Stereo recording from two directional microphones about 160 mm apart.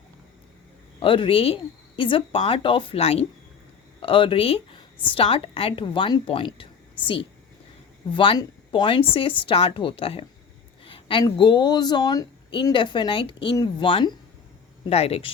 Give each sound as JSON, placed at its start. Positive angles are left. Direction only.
{"t": 0.9, "sound": "a woman's voice", "side_deg": 35}